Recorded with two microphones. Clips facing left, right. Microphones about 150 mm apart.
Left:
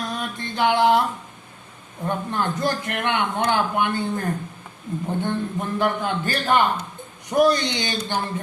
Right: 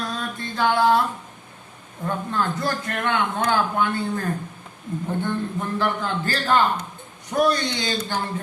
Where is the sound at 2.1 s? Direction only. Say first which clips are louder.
Even; 20° left (ahead or behind).